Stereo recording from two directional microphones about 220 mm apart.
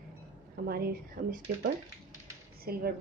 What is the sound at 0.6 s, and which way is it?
Speech, 45° right (ahead or behind).